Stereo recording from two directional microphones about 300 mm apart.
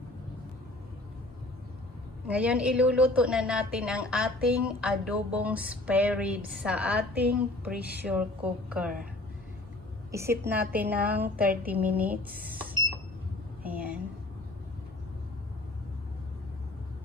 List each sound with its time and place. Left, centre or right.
2.2 s a woman's voice: centre
10.1 s a woman's voice: centre
12.3 s speech: right
13.6 s a sound: centre